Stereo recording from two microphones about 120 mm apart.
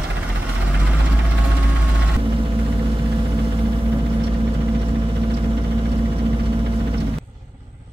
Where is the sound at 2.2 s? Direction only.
45° right (ahead or behind).